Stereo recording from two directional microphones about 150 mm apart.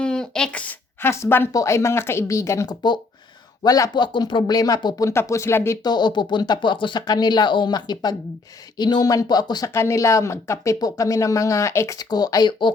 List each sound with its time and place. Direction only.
0.0 s speech: 5° left (ahead or behind); by 12.7 s 30° left (ahead or behind)